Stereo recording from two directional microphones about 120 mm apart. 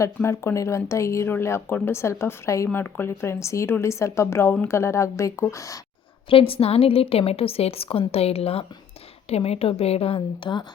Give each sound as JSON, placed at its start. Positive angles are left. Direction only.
{"t": 0.0, "sound": "speech", "side_deg": 20}
{"t": 6.2, "sound": "a woman's voice", "side_deg": 50}
{"t": 10.2, "sound": "speech", "side_deg": 40}